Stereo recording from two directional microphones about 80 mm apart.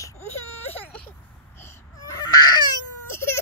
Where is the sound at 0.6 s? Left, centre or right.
Left.